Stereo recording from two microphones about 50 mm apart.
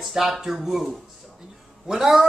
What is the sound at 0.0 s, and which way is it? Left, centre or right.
Speech, centre.